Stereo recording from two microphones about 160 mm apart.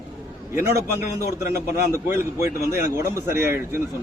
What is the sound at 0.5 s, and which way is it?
Speech, 15° right (ahead or behind).